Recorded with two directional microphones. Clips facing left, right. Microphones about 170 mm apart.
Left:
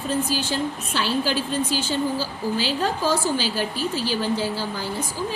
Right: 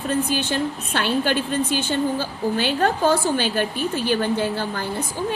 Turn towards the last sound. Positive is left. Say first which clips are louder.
# right 2 dB
turn(degrees=-60)  # may be behind; listen again after turning